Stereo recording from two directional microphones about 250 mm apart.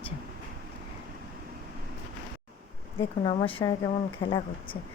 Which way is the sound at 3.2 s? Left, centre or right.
Left.